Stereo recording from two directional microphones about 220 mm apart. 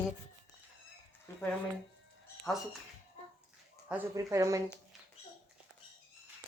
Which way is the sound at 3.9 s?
10° right (ahead or behind).